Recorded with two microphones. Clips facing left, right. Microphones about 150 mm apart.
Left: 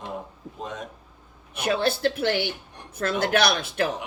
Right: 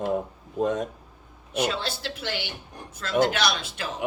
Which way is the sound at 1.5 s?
55° left (ahead or behind).